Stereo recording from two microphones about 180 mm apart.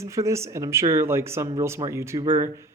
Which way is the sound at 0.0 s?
15° right (ahead or behind).